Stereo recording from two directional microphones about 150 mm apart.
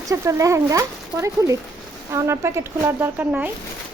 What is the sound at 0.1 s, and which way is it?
Speech, 20° right (ahead or behind).